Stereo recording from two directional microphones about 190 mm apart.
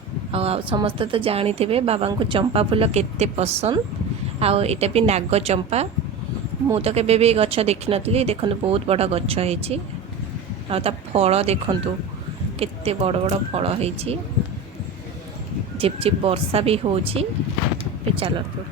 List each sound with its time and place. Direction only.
0.3 s a woman's voice: 30° right (ahead or behind)
15.8 s a woman's voice: 30° right (ahead or behind)